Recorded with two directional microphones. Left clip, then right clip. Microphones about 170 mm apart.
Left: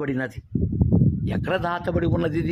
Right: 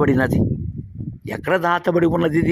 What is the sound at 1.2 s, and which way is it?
A man's voice, 5° right (ahead or behind).